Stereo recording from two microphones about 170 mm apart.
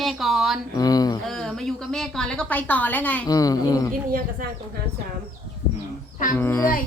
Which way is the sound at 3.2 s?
20° left (ahead or behind).